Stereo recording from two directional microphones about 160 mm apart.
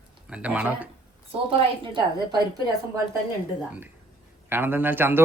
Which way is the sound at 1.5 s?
30° right (ahead or behind).